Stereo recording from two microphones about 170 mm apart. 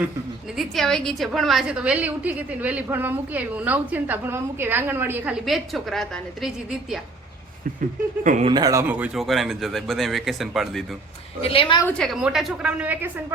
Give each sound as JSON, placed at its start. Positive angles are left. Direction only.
{"t": 0.5, "sound": "a woman's voice", "side_deg": 0}
{"t": 8.2, "sound": "speech", "side_deg": -50}
{"t": 8.4, "sound": "speech", "side_deg": -25}
{"t": 11.4, "sound": "a woman's voice", "side_deg": 30}
{"t": 11.9, "sound": "speech", "side_deg": 5}